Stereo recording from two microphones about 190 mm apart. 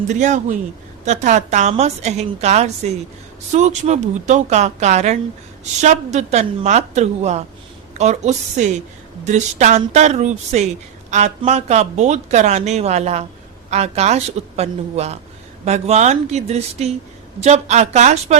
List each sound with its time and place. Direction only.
0.1 s speech: 40° right (ahead or behind)